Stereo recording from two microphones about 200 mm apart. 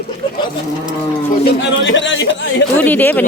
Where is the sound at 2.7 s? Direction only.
10° left (ahead or behind).